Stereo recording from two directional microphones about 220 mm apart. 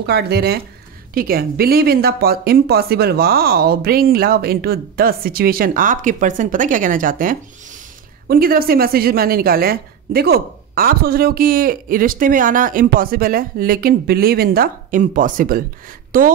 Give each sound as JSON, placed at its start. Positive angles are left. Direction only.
{"t": 0.0, "sound": "a woman's voice", "side_deg": -50}